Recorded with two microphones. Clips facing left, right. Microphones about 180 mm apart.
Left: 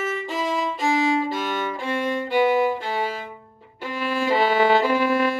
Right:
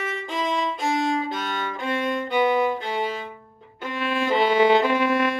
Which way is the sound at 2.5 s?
5° left (ahead or behind).